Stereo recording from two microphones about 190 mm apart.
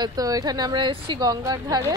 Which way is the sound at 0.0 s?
20° right (ahead or behind).